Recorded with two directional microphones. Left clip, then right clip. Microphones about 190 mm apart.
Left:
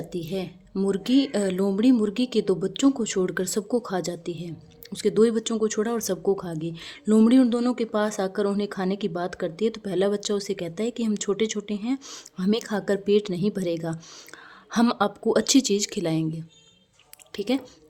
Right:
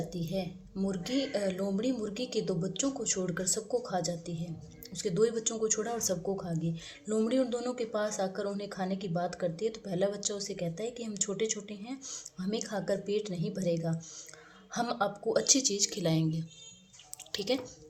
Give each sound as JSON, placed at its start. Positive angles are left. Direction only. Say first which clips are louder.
{"t": 0.1, "sound": "speech", "louder": "left 6 dB", "side_deg": 45}